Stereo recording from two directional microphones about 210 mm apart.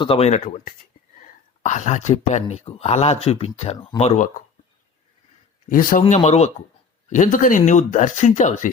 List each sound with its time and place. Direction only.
0.0 s speech: 25° left (ahead or behind)
5.6 s speech: 40° left (ahead or behind)